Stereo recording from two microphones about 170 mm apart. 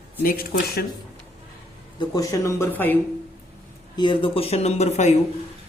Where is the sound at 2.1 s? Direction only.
20° left (ahead or behind).